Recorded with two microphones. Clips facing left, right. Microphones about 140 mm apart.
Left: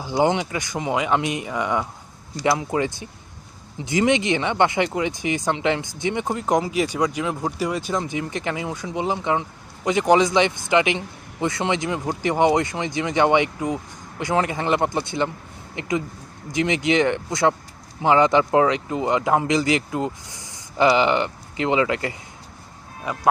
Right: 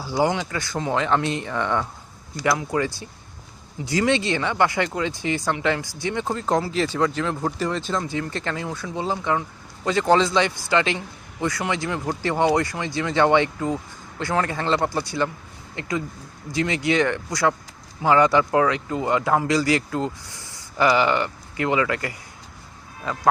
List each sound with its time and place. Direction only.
0.0 s speech: 20° left (ahead or behind)
2.4 s speech: 20° left (ahead or behind)